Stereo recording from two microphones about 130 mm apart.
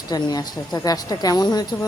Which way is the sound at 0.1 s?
30° left (ahead or behind).